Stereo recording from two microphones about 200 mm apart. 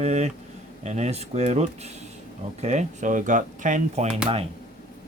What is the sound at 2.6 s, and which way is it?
Speech, 35° right (ahead or behind).